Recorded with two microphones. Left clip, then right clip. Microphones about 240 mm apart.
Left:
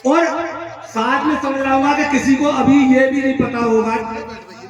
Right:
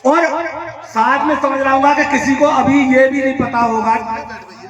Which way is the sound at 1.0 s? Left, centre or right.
Centre.